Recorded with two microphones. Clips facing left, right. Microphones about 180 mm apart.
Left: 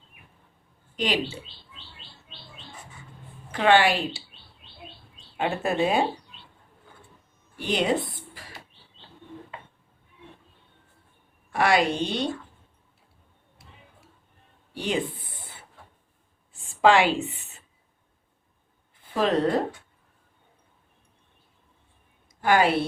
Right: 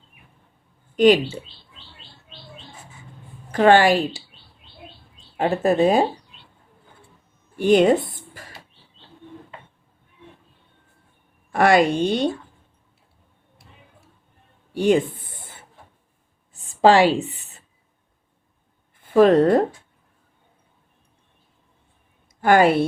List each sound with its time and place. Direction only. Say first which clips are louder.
0.9 s speech: right 13 dB; 50° right (ahead or behind)
3.5 s a woman's voice: right 6 dB; 45° right (ahead or behind)
5.4 s speech: right 7 dB; 35° right (ahead or behind)
7.6 s a woman's voice: right 10 dB; 50° right (ahead or behind)
8.4 s bird: right 4 dB; 50° right (ahead or behind)
11.5 s a woman's voice: right 6 dB; 50° right (ahead or behind)
14.7 s speech: right 12 dB; 50° right (ahead or behind)
16.5 s a sound: right 4 dB; 40° right (ahead or behind)
18.9 s speech: right 10 dB; 50° right (ahead or behind)
22.4 s a woman's voice: right 6 dB; 50° right (ahead or behind)